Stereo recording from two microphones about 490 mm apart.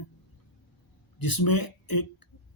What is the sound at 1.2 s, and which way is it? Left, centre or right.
Speech, left.